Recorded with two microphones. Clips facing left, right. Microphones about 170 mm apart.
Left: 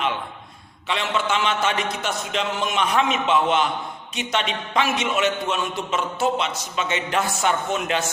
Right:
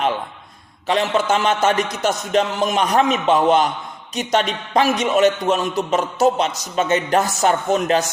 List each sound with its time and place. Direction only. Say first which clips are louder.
0.9 s a man's voice: right 6 dB; 40° right (ahead or behind)